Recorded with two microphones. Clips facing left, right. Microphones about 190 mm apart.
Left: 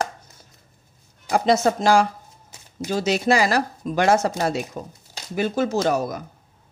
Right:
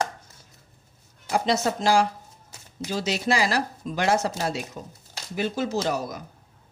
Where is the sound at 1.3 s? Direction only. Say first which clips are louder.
Left 5 dB; 50° left (ahead or behind).